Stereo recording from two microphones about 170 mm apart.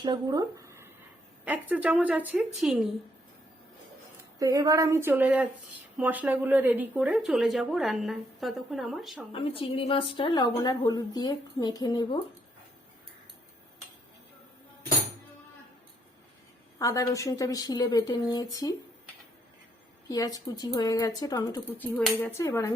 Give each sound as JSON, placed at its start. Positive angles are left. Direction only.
{"t": 0.0, "sound": "a woman's voice", "side_deg": -25}
{"t": 4.4, "sound": "a woman's voice", "side_deg": -20}
{"t": 9.3, "sound": "a woman's voice", "side_deg": 35}
{"t": 16.7, "sound": "a woman's voice", "side_deg": 20}
{"t": 20.1, "sound": "a woman's voice", "side_deg": 20}